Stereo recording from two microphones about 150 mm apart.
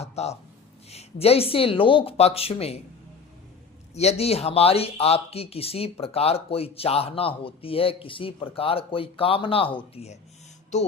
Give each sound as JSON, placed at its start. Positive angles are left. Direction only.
{"t": 0.0, "sound": "speech", "side_deg": 45}
{"t": 3.9, "sound": "speech", "side_deg": 45}